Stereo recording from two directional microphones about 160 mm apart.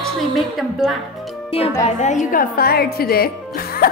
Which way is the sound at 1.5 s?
35° left (ahead or behind).